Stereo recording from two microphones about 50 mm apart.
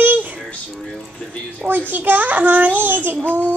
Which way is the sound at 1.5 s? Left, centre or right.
Right.